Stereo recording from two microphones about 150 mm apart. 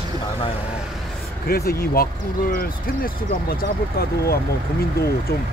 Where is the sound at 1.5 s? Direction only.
90° left.